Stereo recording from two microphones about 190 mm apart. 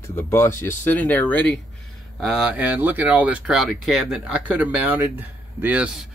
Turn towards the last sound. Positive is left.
turn(degrees=-10)  # may be behind; listen again after turning